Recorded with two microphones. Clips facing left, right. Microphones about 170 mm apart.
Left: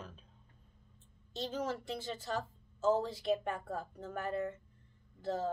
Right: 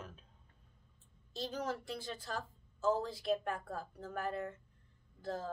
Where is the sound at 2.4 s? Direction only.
25° left (ahead or behind).